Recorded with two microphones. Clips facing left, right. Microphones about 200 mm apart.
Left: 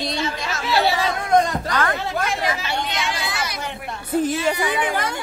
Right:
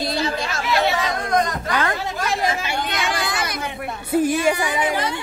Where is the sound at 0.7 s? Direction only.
30° left (ahead or behind).